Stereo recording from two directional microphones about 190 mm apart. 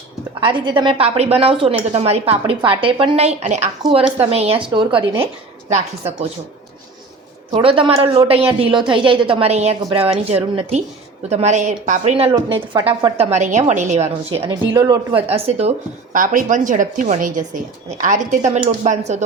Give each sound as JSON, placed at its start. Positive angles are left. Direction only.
{"t": 0.3, "sound": "a woman's voice", "side_deg": -25}
{"t": 5.1, "sound": "a woman's voice", "side_deg": -10}
{"t": 7.5, "sound": "a woman's voice", "side_deg": -30}
{"t": 14.7, "sound": "speech", "side_deg": -15}
{"t": 15.1, "sound": "a woman's voice", "side_deg": -30}
{"t": 16.1, "sound": "a woman's voice", "side_deg": -45}